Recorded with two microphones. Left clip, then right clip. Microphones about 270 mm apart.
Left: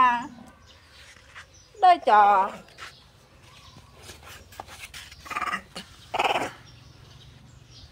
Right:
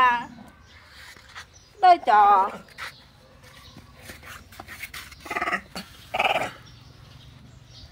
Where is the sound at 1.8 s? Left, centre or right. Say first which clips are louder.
Right 1 dB; left.